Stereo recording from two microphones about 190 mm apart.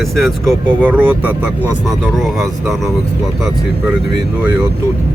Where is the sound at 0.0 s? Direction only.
Centre (ahead or behind).